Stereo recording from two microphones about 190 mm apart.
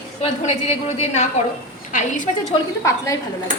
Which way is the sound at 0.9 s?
35° left (ahead or behind).